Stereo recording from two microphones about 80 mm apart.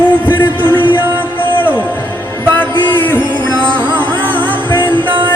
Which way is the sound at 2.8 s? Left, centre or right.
Left.